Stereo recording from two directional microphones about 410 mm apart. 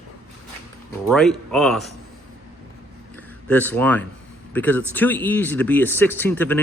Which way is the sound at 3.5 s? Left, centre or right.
Centre.